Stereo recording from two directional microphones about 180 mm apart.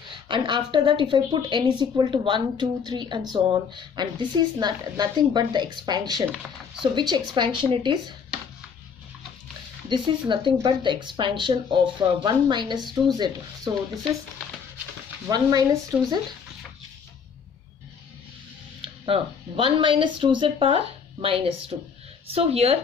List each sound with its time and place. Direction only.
0.3 s speech: 25° right (ahead or behind)
9.8 s speech: 25° right (ahead or behind)
15.2 s speech: 20° right (ahead or behind)
18.8 s speech: 30° right (ahead or behind)